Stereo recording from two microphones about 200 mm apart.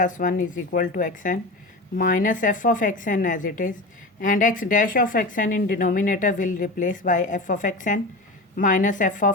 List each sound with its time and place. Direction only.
0.0 s a woman's voice: 40° left (ahead or behind)